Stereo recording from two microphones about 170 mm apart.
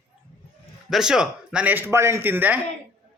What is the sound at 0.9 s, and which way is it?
A man's voice, 5° right (ahead or behind).